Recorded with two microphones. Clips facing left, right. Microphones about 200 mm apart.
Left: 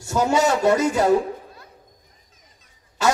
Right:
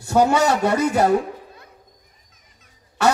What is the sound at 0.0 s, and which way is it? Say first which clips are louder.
A man's voice: right 2 dB; 60° right (ahead or behind).